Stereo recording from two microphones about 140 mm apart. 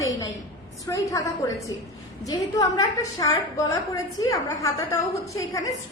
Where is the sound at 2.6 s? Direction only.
25° left (ahead or behind).